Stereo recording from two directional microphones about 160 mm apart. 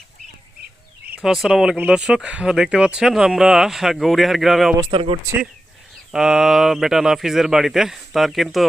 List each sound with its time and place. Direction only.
1.0 s speech: 5° right (ahead or behind)
4.8 s speech: 35° right (ahead or behind)
6.1 s speech: 5° right (ahead or behind)